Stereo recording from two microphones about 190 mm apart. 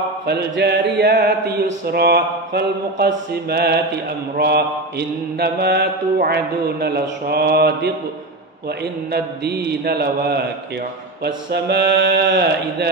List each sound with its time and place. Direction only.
0.3 s mantra: 60° right (ahead or behind)